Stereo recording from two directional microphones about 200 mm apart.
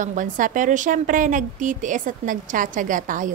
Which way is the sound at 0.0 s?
40° right (ahead or behind).